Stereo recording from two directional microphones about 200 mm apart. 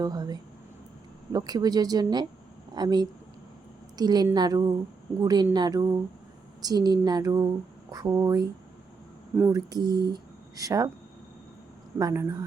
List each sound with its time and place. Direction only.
0.0 s speech: 20° right (ahead or behind)
9.6 s speech: 20° right (ahead or behind)
11.9 s speech: 15° right (ahead or behind)